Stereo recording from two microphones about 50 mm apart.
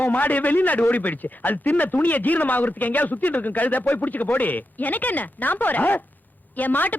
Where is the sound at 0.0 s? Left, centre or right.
Left.